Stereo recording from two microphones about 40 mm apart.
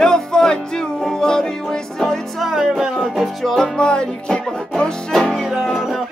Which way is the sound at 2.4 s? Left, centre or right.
Centre.